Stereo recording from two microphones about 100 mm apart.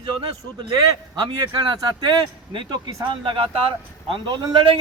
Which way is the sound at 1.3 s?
55° right (ahead or behind).